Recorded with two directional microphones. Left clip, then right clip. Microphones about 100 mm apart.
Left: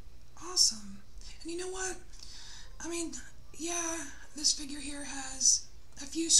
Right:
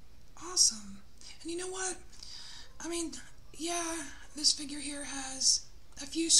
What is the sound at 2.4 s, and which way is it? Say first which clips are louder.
A woman's voice: even; 40° right (ahead or behind).